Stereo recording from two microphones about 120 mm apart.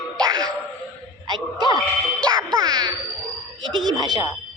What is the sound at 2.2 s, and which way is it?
Music, 35° right (ahead or behind).